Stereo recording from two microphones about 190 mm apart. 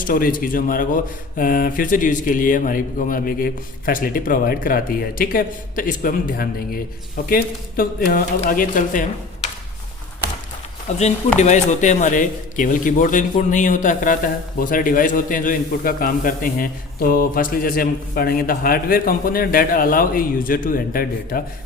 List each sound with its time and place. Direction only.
0.0 s a man's voice: 45° left (ahead or behind)
10.9 s a man's voice: 35° left (ahead or behind)